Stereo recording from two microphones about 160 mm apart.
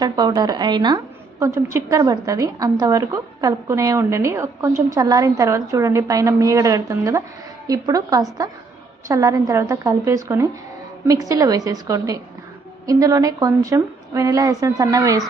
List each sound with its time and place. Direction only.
0.0 s a woman's voice: 25° right (ahead or behind)